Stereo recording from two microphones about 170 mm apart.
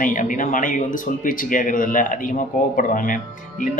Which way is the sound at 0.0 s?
50° left (ahead or behind).